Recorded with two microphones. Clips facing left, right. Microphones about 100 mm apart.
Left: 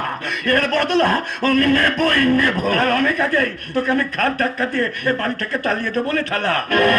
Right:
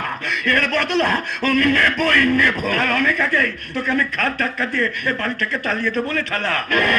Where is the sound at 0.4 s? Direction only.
40° left (ahead or behind).